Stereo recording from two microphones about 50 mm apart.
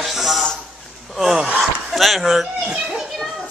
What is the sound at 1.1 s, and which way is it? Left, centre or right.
Speech, centre.